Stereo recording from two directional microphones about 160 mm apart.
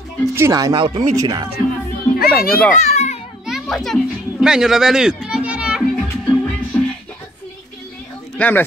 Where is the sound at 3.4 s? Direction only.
Centre (ahead or behind).